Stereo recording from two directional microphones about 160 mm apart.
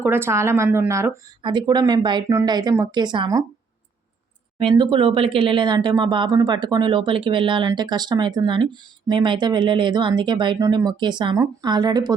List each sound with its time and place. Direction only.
0.0 s speech: 15° right (ahead or behind)
1.4 s speech: 30° right (ahead or behind)
4.7 s speech: 30° right (ahead or behind)